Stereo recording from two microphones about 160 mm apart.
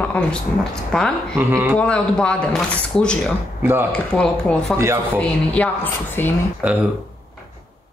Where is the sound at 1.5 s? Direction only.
10° right (ahead or behind).